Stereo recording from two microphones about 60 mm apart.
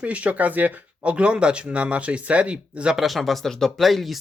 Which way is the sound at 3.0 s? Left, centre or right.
Centre.